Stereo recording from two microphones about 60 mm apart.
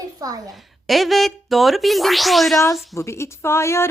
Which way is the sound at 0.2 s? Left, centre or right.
Right.